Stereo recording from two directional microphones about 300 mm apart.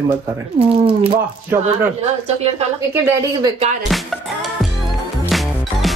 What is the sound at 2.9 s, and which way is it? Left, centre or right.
Speech, centre.